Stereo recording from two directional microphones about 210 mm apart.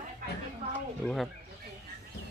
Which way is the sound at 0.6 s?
30° right (ahead or behind).